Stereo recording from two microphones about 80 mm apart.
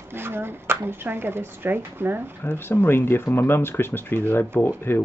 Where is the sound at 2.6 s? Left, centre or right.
Left.